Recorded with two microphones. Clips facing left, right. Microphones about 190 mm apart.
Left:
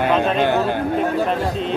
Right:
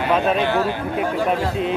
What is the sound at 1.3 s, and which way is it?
Speech, 5° right (ahead or behind).